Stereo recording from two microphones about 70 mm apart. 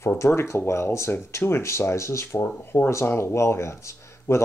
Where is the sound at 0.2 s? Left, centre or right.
Left.